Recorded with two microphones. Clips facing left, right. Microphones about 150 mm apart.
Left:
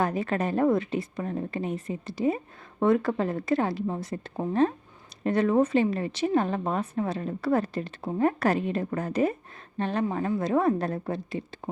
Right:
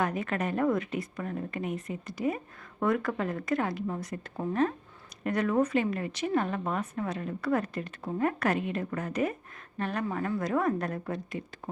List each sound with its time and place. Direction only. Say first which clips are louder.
0.0 s a woman's voice: left 3 dB; 30° left (ahead or behind)